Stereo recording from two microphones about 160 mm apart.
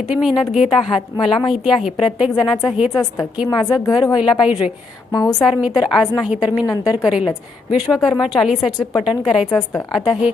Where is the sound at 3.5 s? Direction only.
25° left (ahead or behind).